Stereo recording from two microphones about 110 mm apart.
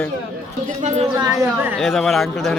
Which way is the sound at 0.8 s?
90° right.